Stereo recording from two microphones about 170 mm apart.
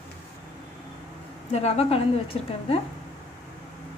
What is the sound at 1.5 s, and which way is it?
Speech, 35° left (ahead or behind).